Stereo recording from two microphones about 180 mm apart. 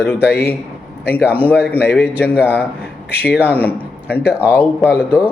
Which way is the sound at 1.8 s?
65° left (ahead or behind).